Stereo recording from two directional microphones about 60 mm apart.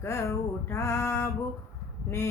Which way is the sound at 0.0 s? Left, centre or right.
Left.